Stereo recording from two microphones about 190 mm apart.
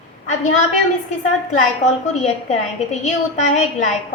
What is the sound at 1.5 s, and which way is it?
Speech, 40° left (ahead or behind).